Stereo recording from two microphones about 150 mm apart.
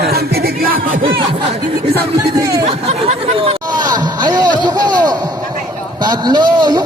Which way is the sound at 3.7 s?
30° right (ahead or behind).